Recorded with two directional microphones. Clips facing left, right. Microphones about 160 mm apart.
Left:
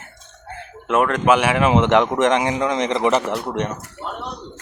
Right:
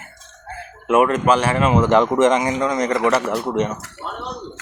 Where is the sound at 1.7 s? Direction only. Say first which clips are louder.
Right 2 dB; 20° left (ahead or behind).